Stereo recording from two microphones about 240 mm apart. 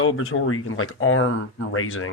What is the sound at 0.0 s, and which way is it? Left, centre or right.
Speech, left.